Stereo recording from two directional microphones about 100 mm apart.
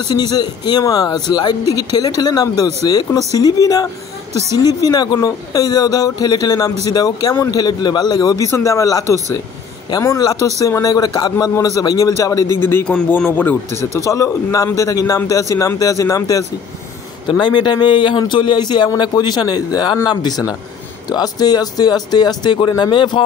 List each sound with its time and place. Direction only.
0.1 s a man's voice: 45° left (ahead or behind)
8.5 s speech: 30° left (ahead or behind)
10.0 s a man's voice: 35° left (ahead or behind); by 13.6 s 15° left (ahead or behind)
13.9 s speech: 35° left (ahead or behind)
17.4 s a man's voice: 50° left (ahead or behind)